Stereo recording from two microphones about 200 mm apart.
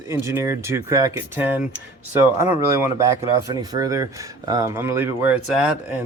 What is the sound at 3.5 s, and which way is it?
Speech, 20° right (ahead or behind).